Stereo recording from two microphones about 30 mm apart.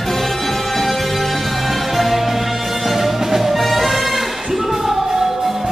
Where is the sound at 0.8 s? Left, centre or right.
Centre.